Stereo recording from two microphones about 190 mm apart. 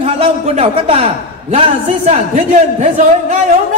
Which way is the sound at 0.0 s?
30° right (ahead or behind).